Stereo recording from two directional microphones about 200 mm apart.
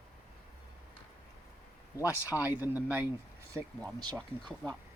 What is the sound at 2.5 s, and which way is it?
Speech, 10° right (ahead or behind).